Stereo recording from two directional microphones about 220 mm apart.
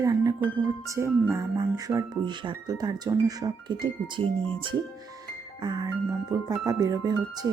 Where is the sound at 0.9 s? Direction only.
15° right (ahead or behind).